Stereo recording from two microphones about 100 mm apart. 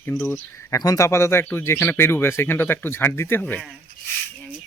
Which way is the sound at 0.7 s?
35° left (ahead or behind).